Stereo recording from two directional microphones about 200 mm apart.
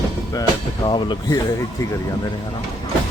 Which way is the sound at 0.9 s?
25° left (ahead or behind).